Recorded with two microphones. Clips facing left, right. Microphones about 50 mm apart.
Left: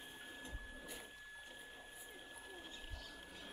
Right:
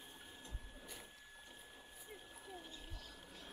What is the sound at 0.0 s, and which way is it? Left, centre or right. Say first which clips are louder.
Printer: left 4 dB; centre.